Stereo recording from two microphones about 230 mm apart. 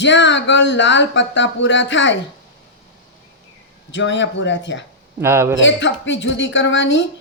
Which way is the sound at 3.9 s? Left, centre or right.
Left.